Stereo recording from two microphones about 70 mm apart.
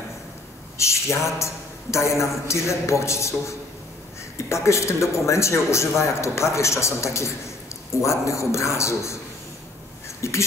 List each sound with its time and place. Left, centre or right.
0.7 s a sound: left
1.4 s a man's voice: left
10.2 s a man's voice: left